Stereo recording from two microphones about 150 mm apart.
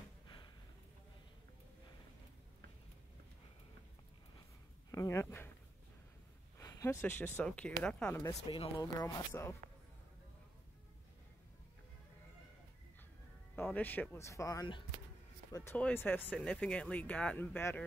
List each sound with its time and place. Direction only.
4.9 s speech: 20° left (ahead or behind)
6.6 s speech: 20° left (ahead or behind)
8.5 s speech: 30° left (ahead or behind)
13.7 s speech: 10° left (ahead or behind)